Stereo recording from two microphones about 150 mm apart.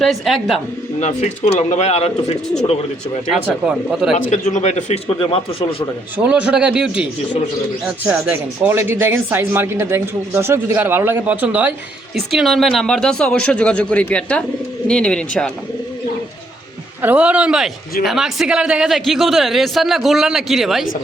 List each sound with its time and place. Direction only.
0.0 s a man's voice: centre (ahead or behind)
0.9 s speech: 50° left (ahead or behind)
3.4 s a man's voice: 5° right (ahead or behind)
4.3 s speech: 50° left (ahead or behind)
6.1 s a man's voice: 10° right (ahead or behind)
17.0 s a man's voice: 10° right (ahead or behind)